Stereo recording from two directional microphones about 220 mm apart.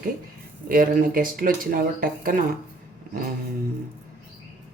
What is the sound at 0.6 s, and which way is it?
Speech, 40° right (ahead or behind).